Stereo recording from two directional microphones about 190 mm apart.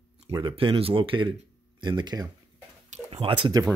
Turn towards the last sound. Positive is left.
turn(degrees=-20)  # may be behind; listen again after turning